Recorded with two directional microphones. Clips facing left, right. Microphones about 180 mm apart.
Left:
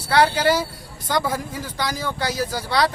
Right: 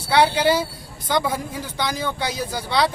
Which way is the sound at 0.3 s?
Centre (ahead or behind).